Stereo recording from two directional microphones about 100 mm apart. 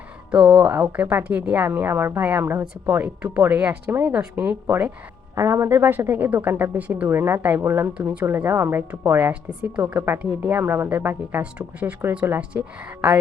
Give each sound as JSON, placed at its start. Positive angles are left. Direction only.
{"t": 0.3, "sound": "speech", "side_deg": -15}
{"t": 4.6, "sound": "speech", "side_deg": -25}